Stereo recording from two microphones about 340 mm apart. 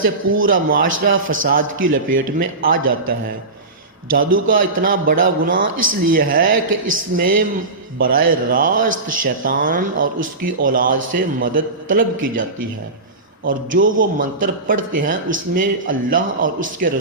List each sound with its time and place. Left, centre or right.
0.0 s speech: right
0.5 s speech: right
2.7 s speech: right
4.1 s speech: right